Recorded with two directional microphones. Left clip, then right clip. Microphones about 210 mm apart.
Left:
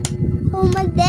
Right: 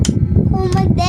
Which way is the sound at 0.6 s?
5° right (ahead or behind).